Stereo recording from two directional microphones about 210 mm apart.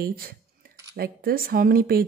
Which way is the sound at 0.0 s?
45° right (ahead or behind).